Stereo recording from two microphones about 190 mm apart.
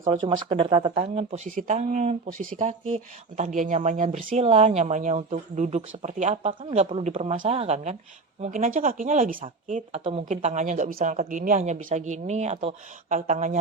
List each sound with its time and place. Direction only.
0.0 s speech: 30° right (ahead or behind)